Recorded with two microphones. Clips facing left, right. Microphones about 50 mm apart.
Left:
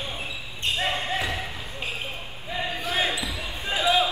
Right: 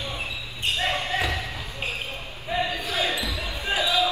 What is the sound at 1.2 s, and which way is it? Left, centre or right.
Basketball bounce, left.